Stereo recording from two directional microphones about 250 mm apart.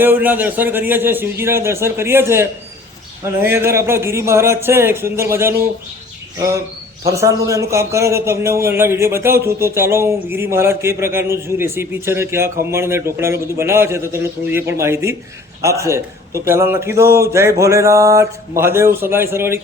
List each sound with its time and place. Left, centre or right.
0.0 s a man's voice: centre
7.0 s a man's voice: centre